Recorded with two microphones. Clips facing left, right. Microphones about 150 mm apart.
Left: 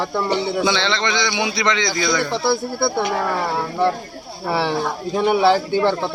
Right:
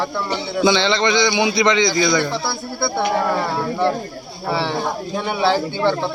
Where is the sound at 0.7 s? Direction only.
5° right (ahead or behind).